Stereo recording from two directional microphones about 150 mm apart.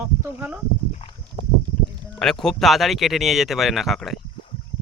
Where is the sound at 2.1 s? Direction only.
5° left (ahead or behind).